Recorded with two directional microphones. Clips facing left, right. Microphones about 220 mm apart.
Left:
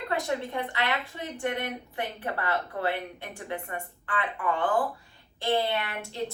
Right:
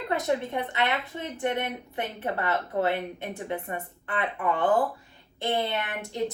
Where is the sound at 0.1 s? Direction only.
20° right (ahead or behind).